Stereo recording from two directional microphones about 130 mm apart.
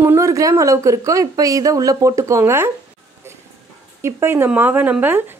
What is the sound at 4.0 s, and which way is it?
A woman's voice, 20° right (ahead or behind).